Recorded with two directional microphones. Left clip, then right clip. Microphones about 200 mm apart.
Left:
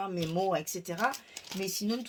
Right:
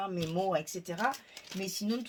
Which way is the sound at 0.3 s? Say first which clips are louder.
Left 1 dB; 35° left (ahead or behind).